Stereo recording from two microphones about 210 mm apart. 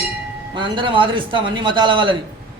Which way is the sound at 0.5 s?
25° right (ahead or behind).